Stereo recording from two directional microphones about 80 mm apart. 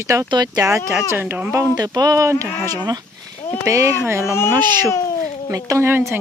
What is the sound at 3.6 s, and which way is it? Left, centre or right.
Speech, right.